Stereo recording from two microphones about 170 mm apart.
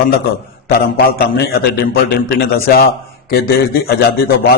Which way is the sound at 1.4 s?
70° left (ahead or behind).